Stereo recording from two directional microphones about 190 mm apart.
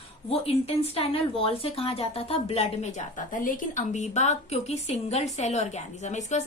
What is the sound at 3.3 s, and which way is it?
A woman's voice, 45° left (ahead or behind).